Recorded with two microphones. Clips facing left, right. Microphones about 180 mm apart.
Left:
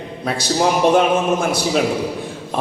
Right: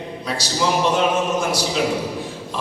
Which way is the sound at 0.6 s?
55° left (ahead or behind).